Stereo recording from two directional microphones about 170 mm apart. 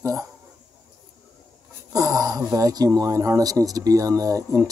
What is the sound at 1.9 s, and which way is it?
Speech, 20° right (ahead or behind).